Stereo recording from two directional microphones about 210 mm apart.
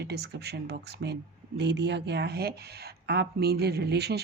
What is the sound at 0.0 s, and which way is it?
Speech, 50° right (ahead or behind).